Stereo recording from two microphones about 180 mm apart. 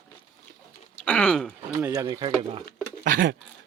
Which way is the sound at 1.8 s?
20° right (ahead or behind).